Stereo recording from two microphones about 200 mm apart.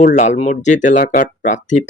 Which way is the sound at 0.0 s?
35° left (ahead or behind).